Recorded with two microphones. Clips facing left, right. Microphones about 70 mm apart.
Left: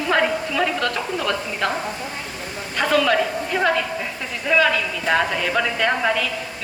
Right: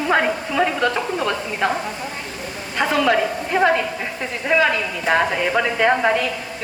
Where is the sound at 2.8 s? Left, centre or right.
Right.